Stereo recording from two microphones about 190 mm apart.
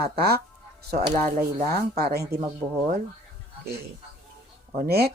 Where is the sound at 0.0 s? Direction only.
55° right (ahead or behind).